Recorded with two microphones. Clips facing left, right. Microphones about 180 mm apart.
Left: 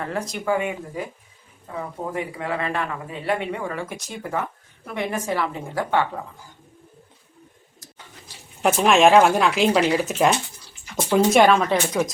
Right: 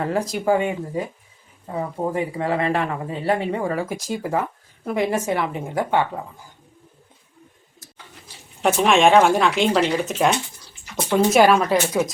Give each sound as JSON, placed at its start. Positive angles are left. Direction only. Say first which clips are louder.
{"t": 0.0, "sound": "speech", "louder": "right 5 dB", "side_deg": -35}
{"t": 5.2, "sound": "speech", "louder": "right 2 dB", "side_deg": -20}
{"t": 8.6, "sound": "speech", "louder": "even", "side_deg": 0}